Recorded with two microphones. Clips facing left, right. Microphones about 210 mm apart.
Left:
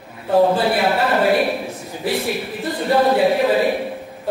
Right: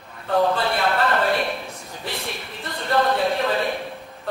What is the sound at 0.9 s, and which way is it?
Speech, 10° left (ahead or behind).